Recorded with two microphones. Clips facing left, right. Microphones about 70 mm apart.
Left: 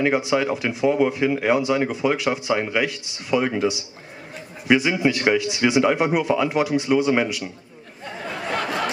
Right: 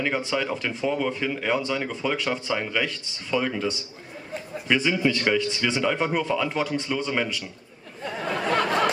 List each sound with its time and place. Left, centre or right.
0.0 s speech: centre